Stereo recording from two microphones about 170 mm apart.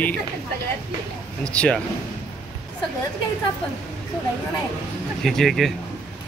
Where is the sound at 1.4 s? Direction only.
5° left (ahead or behind).